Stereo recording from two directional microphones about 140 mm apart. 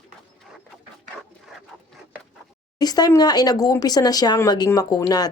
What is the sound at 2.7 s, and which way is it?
A woman's voice, 30° left (ahead or behind).